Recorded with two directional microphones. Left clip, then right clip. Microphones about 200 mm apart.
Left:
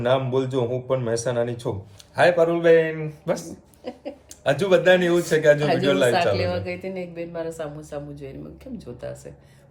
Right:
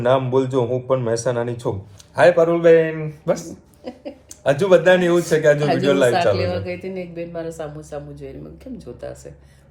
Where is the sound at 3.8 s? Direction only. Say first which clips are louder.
Right 1 dB; 25° left (ahead or behind).